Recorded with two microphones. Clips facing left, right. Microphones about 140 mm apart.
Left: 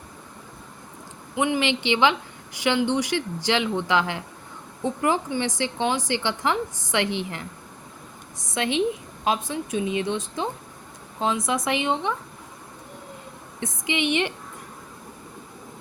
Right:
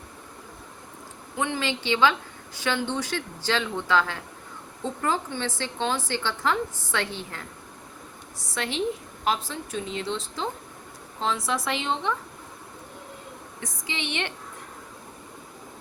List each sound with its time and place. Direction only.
1.4 s a woman's voice: 15° left (ahead or behind)
13.6 s a woman's voice: 15° left (ahead or behind)